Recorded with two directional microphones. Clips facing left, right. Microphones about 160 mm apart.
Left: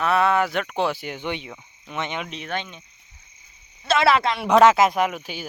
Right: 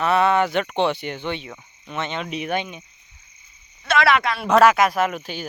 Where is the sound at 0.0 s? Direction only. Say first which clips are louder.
Right 2 dB; centre (ahead or behind).